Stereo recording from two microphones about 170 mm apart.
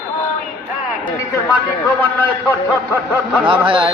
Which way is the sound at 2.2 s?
10° left (ahead or behind).